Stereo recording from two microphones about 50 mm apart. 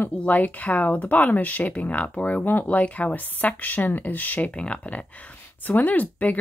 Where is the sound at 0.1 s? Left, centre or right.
Left.